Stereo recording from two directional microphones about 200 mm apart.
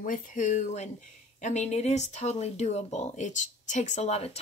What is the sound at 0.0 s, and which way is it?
Speech, 40° left (ahead or behind).